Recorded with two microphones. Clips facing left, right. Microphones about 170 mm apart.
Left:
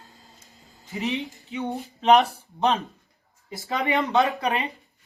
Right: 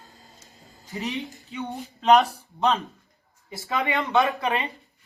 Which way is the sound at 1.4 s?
15° left (ahead or behind).